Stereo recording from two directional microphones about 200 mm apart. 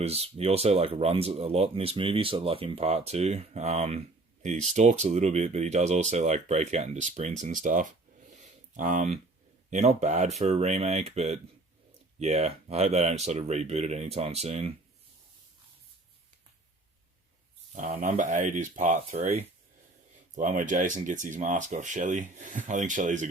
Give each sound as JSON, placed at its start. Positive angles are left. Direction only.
{"t": 0.0, "sound": "speech", "side_deg": -30}
{"t": 17.7, "sound": "speech", "side_deg": -35}